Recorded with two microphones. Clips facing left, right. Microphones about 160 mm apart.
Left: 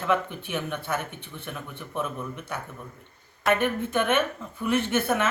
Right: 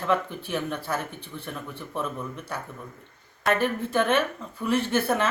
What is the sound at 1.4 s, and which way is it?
Speech, centre (ahead or behind).